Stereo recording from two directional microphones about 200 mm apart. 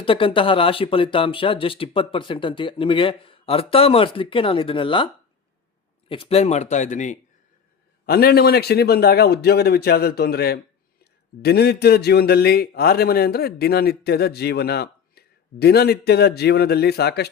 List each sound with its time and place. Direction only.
0.0 s speech: 25° left (ahead or behind)
6.1 s speech: 30° left (ahead or behind)
8.0 s a man's voice: 50° left (ahead or behind)